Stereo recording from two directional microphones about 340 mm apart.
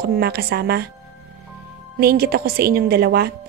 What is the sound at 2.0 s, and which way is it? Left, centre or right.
A woman's voice, right.